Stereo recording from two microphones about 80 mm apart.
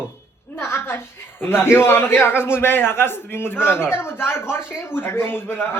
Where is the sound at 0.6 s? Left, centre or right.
Left.